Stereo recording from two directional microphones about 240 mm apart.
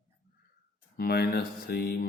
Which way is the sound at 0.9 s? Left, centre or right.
Left.